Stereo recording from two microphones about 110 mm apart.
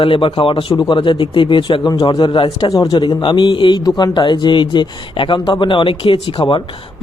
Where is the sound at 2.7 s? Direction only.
35° left (ahead or behind).